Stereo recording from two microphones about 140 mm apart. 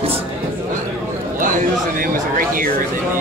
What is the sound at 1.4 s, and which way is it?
Speech, 80° right.